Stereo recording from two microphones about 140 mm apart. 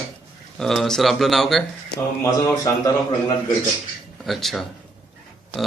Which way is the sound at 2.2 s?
20° left (ahead or behind).